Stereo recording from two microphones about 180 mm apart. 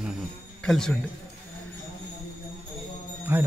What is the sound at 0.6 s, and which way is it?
Speech, 5° left (ahead or behind).